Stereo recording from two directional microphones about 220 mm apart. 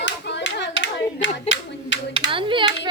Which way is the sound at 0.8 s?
55° left (ahead or behind).